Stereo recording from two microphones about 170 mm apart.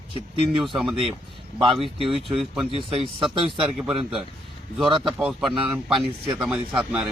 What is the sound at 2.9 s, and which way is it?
Speech, 35° right (ahead or behind).